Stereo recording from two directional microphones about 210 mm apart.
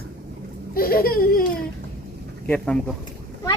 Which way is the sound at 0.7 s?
45° left (ahead or behind).